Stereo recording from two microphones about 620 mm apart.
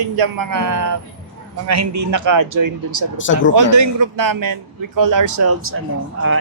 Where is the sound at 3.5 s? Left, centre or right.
Right.